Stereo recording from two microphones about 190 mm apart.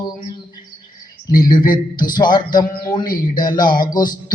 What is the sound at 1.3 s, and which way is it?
Speech, 45° left (ahead or behind).